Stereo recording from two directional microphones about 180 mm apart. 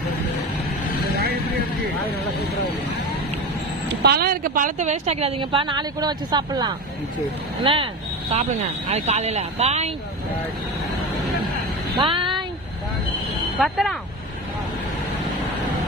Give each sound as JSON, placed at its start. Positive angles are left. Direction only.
{"t": 4.0, "sound": "a woman's voice", "side_deg": -60}
{"t": 11.9, "sound": "a sound", "side_deg": -25}
{"t": 13.6, "sound": "speech", "side_deg": 0}